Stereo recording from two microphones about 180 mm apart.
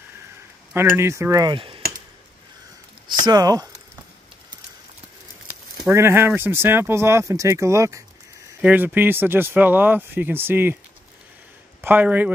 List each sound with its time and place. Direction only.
0.7 s speech: 15° right (ahead or behind)
3.2 s speech: 20° right (ahead or behind)
5.8 s speech: 15° right (ahead or behind)
11.8 s speech: 10° right (ahead or behind)